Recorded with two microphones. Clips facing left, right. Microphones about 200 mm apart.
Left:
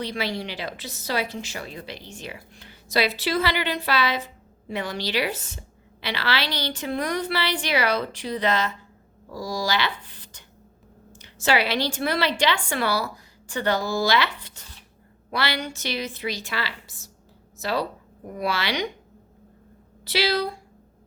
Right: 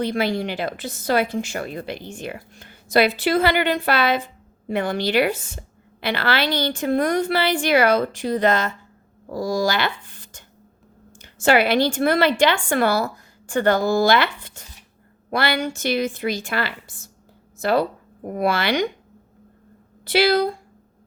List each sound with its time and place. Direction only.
0.0 s a woman's voice: 50° right (ahead or behind)
20.1 s a woman's voice: 50° right (ahead or behind)